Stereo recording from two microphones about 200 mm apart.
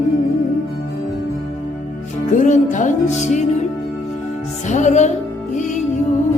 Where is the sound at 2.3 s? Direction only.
40° left (ahead or behind).